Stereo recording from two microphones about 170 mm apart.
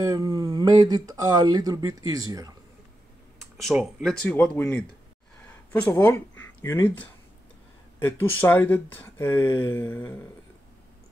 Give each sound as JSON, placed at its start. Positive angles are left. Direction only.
{"t": 0.0, "sound": "speech", "side_deg": -20}
{"t": 3.3, "sound": "speech", "side_deg": 0}